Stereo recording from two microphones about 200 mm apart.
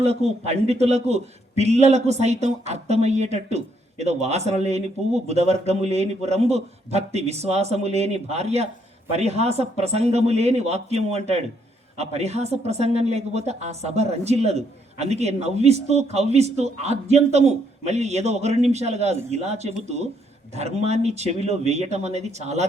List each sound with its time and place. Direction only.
0.0 s a man's voice: 30° right (ahead or behind)